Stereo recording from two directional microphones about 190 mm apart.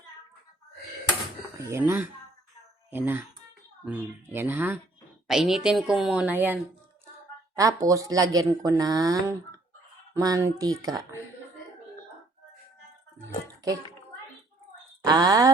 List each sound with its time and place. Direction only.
1.5 s a woman's voice: 15° right (ahead or behind)
15.0 s speech: 20° right (ahead or behind)